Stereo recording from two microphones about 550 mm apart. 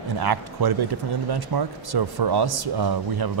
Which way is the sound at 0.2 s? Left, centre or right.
Right.